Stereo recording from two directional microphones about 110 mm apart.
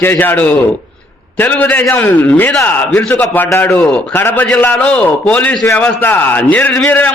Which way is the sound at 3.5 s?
25° left (ahead or behind).